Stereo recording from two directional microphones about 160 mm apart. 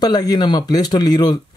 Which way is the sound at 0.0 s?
25° left (ahead or behind).